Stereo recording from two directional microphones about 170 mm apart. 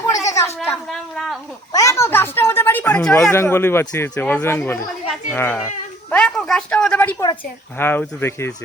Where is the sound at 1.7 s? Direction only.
20° left (ahead or behind).